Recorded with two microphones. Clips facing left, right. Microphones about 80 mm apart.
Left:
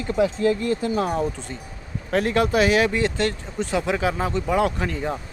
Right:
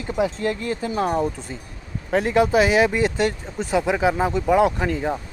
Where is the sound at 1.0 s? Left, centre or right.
Centre.